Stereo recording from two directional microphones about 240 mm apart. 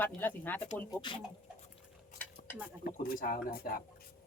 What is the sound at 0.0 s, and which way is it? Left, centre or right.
Speech, centre.